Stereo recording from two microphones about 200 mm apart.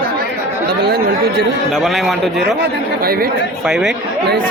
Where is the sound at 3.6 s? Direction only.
5° right (ahead or behind).